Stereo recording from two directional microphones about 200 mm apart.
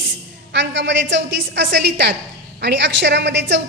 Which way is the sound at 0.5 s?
65° right (ahead or behind).